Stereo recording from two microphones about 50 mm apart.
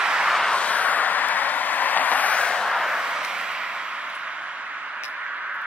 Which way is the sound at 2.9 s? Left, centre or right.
Centre.